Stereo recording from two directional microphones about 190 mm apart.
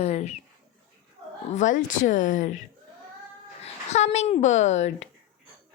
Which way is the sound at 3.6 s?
35° left (ahead or behind).